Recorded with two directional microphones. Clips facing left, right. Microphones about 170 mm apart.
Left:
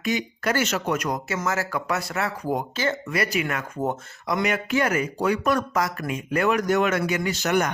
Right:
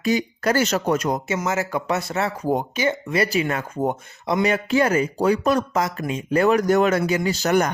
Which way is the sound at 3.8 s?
15° right (ahead or behind).